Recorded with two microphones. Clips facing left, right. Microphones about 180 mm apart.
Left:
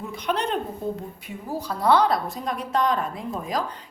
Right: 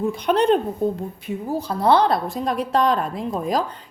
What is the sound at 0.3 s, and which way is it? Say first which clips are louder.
A woman's voice: right 7 dB; 35° right (ahead or behind).